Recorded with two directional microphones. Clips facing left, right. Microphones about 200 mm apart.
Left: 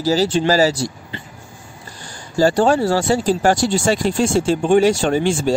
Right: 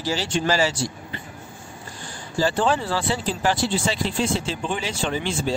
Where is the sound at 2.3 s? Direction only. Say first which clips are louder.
Left 7 dB; 45° left (ahead or behind).